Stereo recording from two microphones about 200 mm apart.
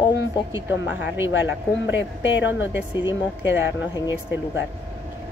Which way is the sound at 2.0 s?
65° left (ahead or behind).